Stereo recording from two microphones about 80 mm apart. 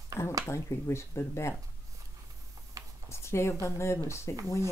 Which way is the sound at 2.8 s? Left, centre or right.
Right.